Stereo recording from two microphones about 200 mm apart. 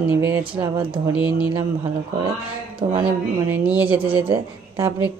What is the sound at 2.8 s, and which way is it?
Speech, 25° right (ahead or behind).